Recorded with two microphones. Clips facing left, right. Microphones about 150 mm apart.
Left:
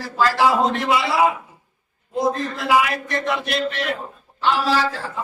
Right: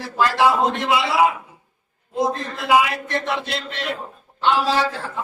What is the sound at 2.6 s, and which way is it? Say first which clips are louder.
A man's voice: right 1 dB; 20° right (ahead or behind).